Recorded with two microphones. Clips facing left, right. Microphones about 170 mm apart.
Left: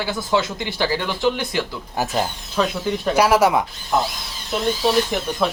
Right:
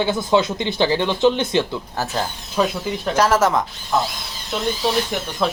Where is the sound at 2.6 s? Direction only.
5° right (ahead or behind).